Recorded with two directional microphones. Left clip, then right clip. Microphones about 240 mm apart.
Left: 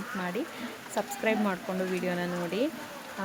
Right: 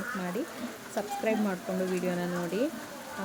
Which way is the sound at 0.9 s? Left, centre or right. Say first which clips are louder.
Left 1 dB; centre.